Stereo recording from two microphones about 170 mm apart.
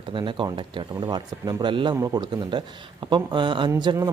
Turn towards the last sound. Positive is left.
turn(degrees=-20)  # may be behind; listen again after turning